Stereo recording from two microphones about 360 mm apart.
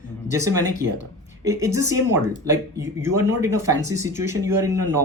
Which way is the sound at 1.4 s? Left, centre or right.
Centre.